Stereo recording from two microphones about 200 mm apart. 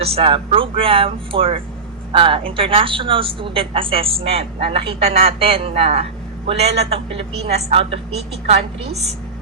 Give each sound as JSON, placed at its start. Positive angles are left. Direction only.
{"t": 0.0, "sound": "a woman's voice", "side_deg": -30}